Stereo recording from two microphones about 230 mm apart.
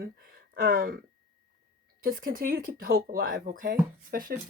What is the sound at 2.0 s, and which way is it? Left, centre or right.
Speech, right.